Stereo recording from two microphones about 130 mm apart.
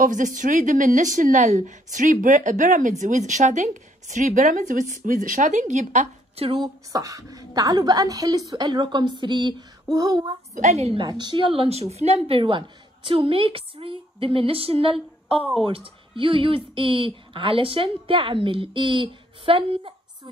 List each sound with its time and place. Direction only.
0.0 s a woman's voice: 85° right; by 6.5 s 60° right (ahead or behind)
6.5 s a woman's voice: 30° right (ahead or behind)
10.5 s a woman's voice: 60° right (ahead or behind)
11.0 s speech: 35° right (ahead or behind)